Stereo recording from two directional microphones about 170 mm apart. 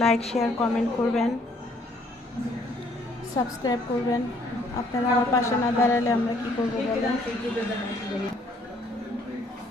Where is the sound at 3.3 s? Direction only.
20° left (ahead or behind).